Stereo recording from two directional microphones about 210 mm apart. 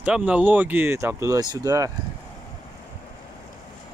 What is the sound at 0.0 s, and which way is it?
Speech, 5° right (ahead or behind).